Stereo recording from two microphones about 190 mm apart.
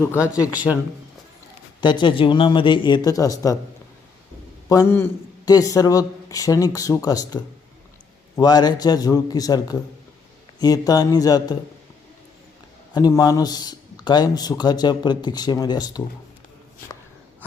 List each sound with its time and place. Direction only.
0.7 s speech: 5° left (ahead or behind)
1.8 s a man's voice: 25° left (ahead or behind)
4.7 s a man's voice: 15° left (ahead or behind)
12.9 s a man's voice: 20° left (ahead or behind)